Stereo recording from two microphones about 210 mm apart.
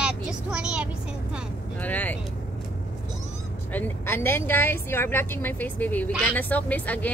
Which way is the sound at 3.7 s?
10° left (ahead or behind).